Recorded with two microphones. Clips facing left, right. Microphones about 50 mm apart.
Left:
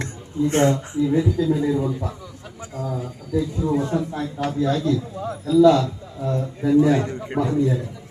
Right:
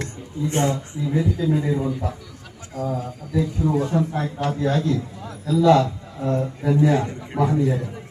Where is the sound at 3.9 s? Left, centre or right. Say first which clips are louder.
Right 2 dB; centre.